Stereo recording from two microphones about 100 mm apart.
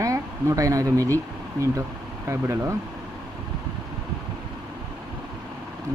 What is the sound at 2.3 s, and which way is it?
Speech, 30° right (ahead or behind).